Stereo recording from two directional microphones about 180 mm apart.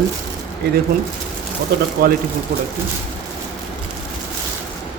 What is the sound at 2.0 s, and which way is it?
Speech, 60° right (ahead or behind).